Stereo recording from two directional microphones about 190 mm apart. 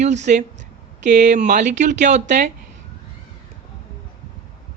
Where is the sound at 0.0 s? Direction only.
35° right (ahead or behind).